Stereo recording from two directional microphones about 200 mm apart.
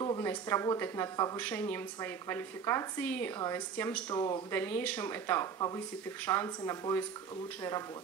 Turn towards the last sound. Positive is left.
turn(degrees=15)  # may be behind; listen again after turning